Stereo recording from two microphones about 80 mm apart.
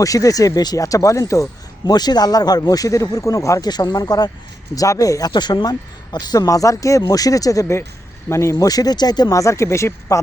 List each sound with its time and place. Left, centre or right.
0.0 s speech: left
1.9 s speech: left
3.7 s speech: left
5.3 s speech: left
8.6 s speech: left
9.3 s speech: left